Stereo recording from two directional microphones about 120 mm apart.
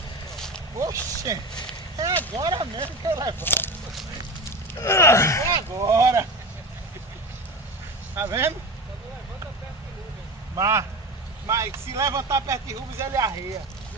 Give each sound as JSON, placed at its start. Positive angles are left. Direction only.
{"t": 0.7, "sound": "speech", "side_deg": -30}
{"t": 2.3, "sound": "speech", "side_deg": -40}
{"t": 3.3, "sound": "speech", "side_deg": 15}
{"t": 5.8, "sound": "speech", "side_deg": -25}
{"t": 8.2, "sound": "speech", "side_deg": -20}
{"t": 10.5, "sound": "speech", "side_deg": -25}